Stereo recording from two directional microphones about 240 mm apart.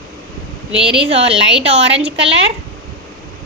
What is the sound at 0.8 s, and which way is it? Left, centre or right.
Speech, centre.